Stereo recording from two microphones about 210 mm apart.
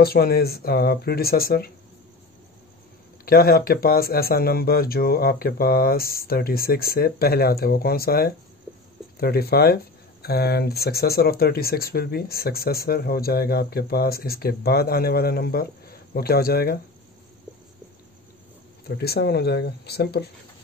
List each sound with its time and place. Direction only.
0.0 s speech: 45° left (ahead or behind)
3.3 s speech: 45° left (ahead or behind)
18.9 s speech: 50° left (ahead or behind)